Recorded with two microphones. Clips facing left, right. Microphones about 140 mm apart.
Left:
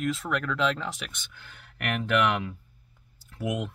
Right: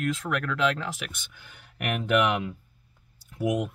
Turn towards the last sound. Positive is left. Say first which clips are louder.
# right 4 dB
turn(degrees=-20)  # may be behind; listen again after turning